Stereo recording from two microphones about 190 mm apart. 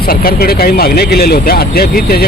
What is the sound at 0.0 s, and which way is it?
Speech, 50° left (ahead or behind).